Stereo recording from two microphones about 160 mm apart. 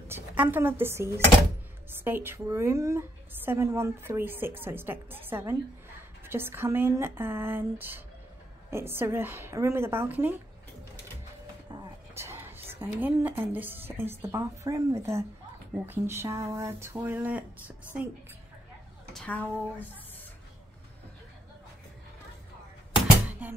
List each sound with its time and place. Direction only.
0.1 s a woman's voice: 10° right (ahead or behind)
11.7 s a woman's voice: 20° right (ahead or behind)
19.1 s speech: 10° left (ahead or behind)
23.4 s a woman's voice: 5° right (ahead or behind)